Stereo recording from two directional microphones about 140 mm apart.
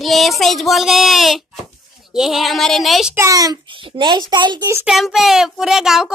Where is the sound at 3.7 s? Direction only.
35° right (ahead or behind).